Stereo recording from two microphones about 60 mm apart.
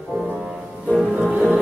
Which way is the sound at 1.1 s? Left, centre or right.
Right.